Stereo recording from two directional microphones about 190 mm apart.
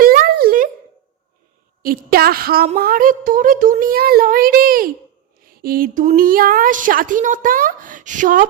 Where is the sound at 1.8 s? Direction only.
50° right (ahead or behind).